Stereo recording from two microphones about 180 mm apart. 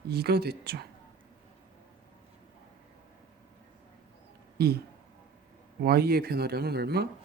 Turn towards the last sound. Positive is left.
turn(degrees=-65)  # may be behind; listen again after turning